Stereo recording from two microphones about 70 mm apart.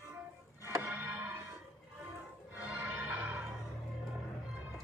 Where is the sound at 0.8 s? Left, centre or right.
Right.